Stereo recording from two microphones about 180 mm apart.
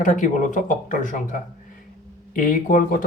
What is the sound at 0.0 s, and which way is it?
Speech, 45° left (ahead or behind).